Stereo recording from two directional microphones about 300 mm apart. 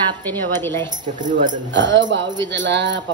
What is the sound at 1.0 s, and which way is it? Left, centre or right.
Speech, right.